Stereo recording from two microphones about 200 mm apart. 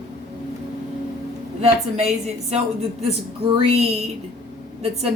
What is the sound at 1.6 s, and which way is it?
Speech, 35° right (ahead or behind).